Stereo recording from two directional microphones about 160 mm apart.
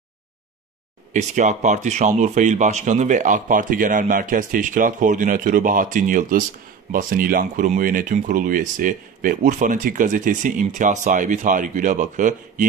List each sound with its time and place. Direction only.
1.1 s speech: 50° right (ahead or behind)